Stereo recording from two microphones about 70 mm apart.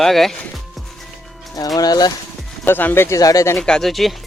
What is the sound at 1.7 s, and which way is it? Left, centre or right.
Speech, left.